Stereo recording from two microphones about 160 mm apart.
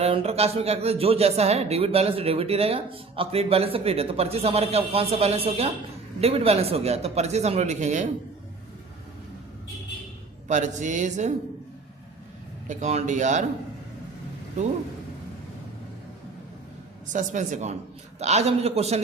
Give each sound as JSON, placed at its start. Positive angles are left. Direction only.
{"t": 0.0, "sound": "speech", "side_deg": -40}
{"t": 10.5, "sound": "speech", "side_deg": -50}
{"t": 12.6, "sound": "speech", "side_deg": -50}
{"t": 17.1, "sound": "speech", "side_deg": -50}